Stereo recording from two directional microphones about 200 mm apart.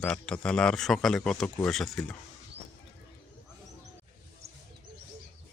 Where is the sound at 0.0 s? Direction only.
5° left (ahead or behind).